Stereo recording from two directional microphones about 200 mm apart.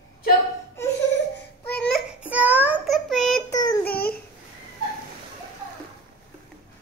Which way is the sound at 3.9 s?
50° left (ahead or behind).